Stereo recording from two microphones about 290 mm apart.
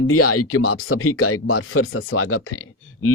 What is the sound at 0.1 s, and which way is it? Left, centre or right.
Speech, left.